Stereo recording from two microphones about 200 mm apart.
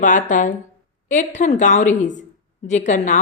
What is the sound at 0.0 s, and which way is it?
A woman's voice, 40° left (ahead or behind).